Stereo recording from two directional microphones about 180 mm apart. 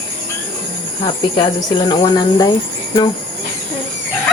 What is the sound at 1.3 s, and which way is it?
Speech, 25° left (ahead or behind).